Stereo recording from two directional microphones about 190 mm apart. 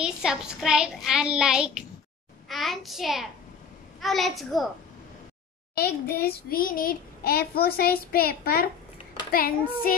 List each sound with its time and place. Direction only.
0.0 s a child's voice: 5° right (ahead or behind)
5.8 s a child's voice: 55° left (ahead or behind)